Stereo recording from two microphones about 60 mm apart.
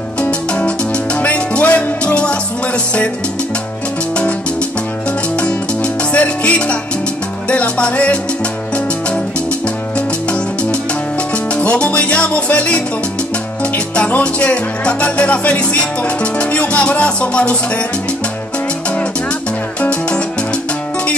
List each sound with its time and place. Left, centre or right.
0.2 s music: centre
6.1 s music: left
11.5 s music: centre
13.9 s music: centre
19.8 s music: centre